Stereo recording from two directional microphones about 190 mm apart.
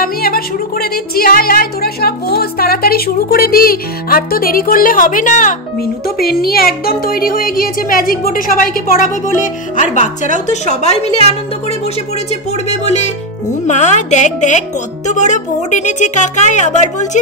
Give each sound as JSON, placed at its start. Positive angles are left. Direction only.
{"t": 0.0, "sound": "music", "side_deg": 50}
{"t": 6.0, "sound": "music", "side_deg": 55}
{"t": 10.3, "sound": "a woman's voice", "side_deg": 35}
{"t": 12.6, "sound": "a woman's voice", "side_deg": 35}